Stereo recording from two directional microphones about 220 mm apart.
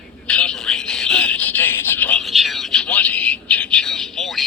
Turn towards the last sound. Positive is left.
turn(degrees=0)  # may be behind; listen again after turning